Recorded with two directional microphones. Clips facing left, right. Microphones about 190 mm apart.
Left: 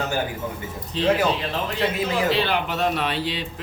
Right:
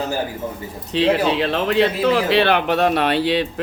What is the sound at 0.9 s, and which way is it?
Speech, 70° right (ahead or behind).